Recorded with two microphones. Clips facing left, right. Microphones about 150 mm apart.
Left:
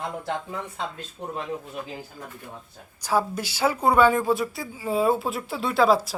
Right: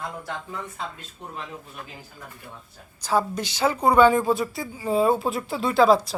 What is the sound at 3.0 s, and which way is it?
Speech, 10° left (ahead or behind).